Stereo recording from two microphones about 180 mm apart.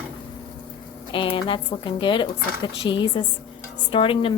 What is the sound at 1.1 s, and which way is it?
A woman's voice, 30° left (ahead or behind).